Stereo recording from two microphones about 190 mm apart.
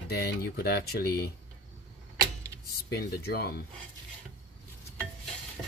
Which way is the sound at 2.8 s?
55° left (ahead or behind).